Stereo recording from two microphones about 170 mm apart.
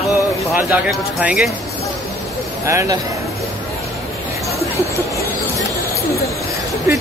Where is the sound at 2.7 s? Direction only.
20° right (ahead or behind).